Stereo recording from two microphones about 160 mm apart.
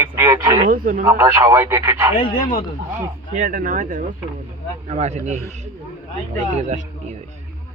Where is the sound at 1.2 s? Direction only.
20° right (ahead or behind).